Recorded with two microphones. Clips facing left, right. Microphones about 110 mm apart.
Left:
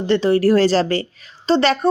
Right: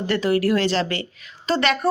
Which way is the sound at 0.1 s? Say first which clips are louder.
Left 5 dB; 30° left (ahead or behind).